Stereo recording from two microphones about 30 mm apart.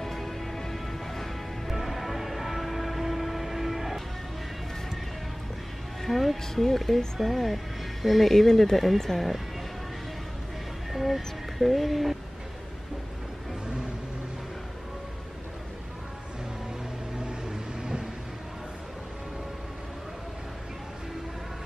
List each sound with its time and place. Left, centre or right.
0.0 s music: centre
1.7 s music: centre
6.0 s music: centre
6.5 s speech: centre
8.3 s speech: centre
10.9 s speech: centre
17.2 s vehicle: right